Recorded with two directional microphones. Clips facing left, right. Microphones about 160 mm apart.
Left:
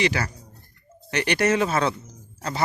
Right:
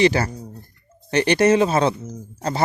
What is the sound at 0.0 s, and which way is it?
Speech, 30° right (ahead or behind).